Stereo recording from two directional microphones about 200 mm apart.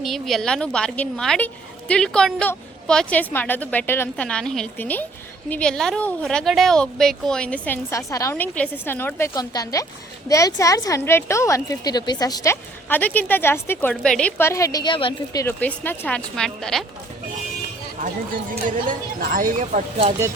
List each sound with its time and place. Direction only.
0.0 s a woman's voice: centre (ahead or behind)
18.5 s a woman's voice: 45° right (ahead or behind)